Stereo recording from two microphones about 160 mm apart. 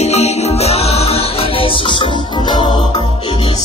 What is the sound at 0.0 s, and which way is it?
Music, 40° left (ahead or behind).